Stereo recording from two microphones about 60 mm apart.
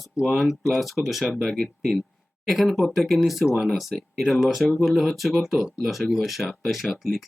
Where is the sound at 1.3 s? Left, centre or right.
Centre.